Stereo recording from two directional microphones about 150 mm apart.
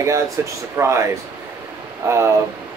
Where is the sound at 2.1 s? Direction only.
20° right (ahead or behind).